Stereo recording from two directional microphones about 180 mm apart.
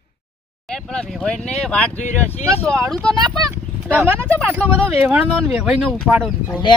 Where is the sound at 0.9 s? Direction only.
5° left (ahead or behind).